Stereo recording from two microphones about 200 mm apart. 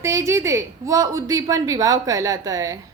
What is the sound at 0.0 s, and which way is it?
A woman's voice, 15° right (ahead or behind).